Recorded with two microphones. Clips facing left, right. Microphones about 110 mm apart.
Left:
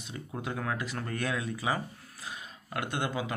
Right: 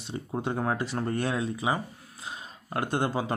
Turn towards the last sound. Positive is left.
turn(degrees=-35)  # may be behind; listen again after turning